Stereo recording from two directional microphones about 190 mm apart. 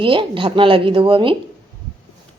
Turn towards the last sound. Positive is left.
turn(degrees=-25)  # may be behind; listen again after turning